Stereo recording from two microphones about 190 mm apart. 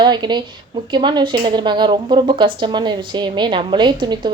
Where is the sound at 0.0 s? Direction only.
25° right (ahead or behind).